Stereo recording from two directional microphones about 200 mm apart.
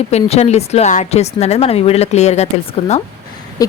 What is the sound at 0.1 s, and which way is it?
Speech, 30° left (ahead or behind).